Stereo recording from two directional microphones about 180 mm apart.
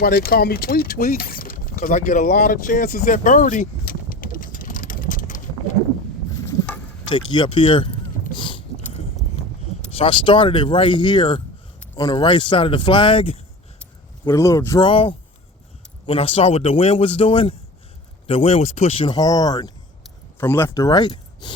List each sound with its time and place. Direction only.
0.0 s speech: 55° left (ahead or behind)
7.1 s speech: 25° left (ahead or behind)
8.3 s a sound: 25° left (ahead or behind)
9.9 s speech: 30° left (ahead or behind)
14.3 s speech: 15° left (ahead or behind)
14.8 s speech: 30° left (ahead or behind)